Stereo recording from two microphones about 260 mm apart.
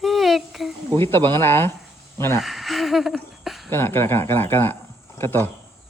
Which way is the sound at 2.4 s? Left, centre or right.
Centre.